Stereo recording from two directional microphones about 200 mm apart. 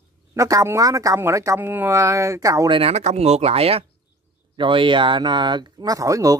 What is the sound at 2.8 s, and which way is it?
Speech, 30° right (ahead or behind).